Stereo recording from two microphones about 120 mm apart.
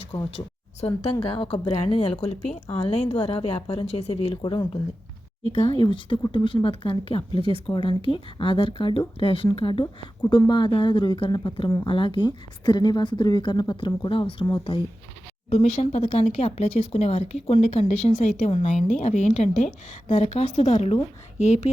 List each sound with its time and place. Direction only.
0.1 s speech: 25° left (ahead or behind)
0.8 s speech: 60° left (ahead or behind)
5.5 s a woman's voice: 50° left (ahead or behind)
15.4 s speech: 65° left (ahead or behind)
18.5 s a woman's voice: 60° left (ahead or behind)
20.1 s speech: 55° left (ahead or behind)